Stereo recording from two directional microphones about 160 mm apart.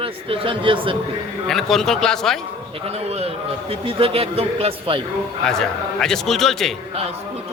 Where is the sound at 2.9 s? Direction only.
40° right (ahead or behind).